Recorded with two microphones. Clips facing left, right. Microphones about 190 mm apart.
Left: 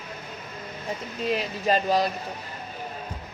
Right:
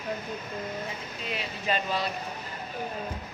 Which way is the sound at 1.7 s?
40° left (ahead or behind).